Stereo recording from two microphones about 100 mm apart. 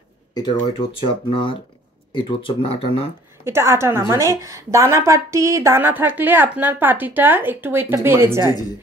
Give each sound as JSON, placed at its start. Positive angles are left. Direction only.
{"t": 0.3, "sound": "speech", "side_deg": 45}
{"t": 3.4, "sound": "a woman's voice", "side_deg": -25}